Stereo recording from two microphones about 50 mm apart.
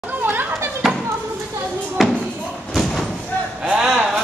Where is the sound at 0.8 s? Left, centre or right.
Centre.